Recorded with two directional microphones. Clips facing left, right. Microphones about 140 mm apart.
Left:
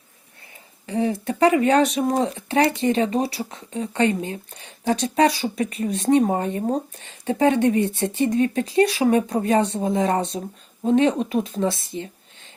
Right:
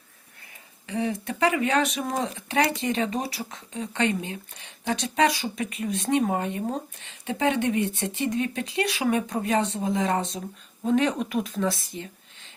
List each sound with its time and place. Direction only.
0.9 s speech: 35° left (ahead or behind)